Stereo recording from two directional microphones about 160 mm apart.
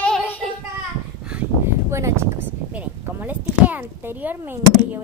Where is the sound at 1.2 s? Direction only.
10° right (ahead or behind).